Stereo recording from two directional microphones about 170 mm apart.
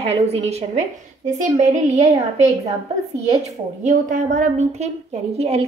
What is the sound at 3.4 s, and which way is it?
A woman's voice, 45° right (ahead or behind).